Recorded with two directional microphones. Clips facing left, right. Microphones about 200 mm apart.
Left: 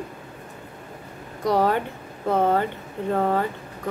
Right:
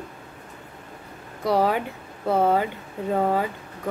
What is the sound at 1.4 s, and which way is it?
Speech, 5° right (ahead or behind).